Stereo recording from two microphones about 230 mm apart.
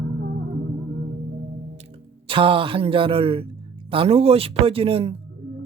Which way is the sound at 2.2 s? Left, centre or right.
Right.